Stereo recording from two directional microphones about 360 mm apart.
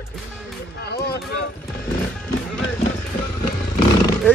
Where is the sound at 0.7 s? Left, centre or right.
Left.